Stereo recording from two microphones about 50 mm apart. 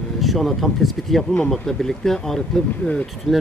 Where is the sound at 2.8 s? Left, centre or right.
Left.